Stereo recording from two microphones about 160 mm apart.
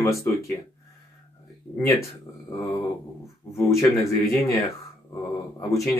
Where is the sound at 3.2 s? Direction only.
20° left (ahead or behind).